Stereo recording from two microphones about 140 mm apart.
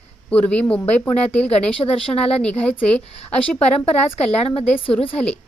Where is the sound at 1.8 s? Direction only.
30° left (ahead or behind).